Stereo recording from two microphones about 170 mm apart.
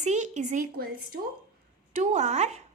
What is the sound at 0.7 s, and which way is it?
Speech, 60° right (ahead or behind).